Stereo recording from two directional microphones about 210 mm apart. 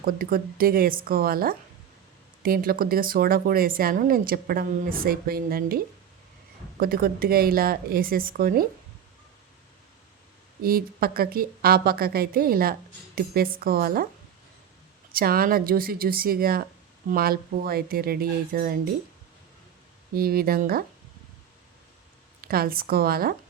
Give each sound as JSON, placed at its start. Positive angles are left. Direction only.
{"t": 0.0, "sound": "speech", "side_deg": -45}
{"t": 10.6, "sound": "speech", "side_deg": -45}
{"t": 15.1, "sound": "speech", "side_deg": -45}
{"t": 20.1, "sound": "speech", "side_deg": -45}
{"t": 22.4, "sound": "speech", "side_deg": -45}